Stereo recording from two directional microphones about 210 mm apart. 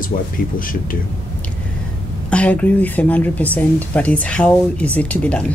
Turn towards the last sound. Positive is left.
turn(degrees=5)  # may be behind; listen again after turning